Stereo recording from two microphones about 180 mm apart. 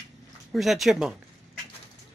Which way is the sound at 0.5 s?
Centre (ahead or behind).